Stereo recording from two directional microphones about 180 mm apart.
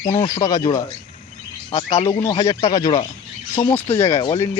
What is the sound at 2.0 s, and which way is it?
Speech, 25° left (ahead or behind).